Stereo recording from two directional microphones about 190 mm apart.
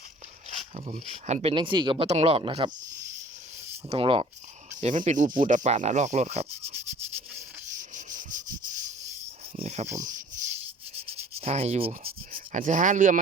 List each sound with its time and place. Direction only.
0.9 s speech: 35° right (ahead or behind)
3.8 s speech: 30° right (ahead or behind)
4.8 s speech: 40° right (ahead or behind)
7.3 s rub: 40° right (ahead or behind)
9.6 s speech: 35° right (ahead or behind)
10.9 s rub: 30° right (ahead or behind)
12.3 s speech: 45° right (ahead or behind)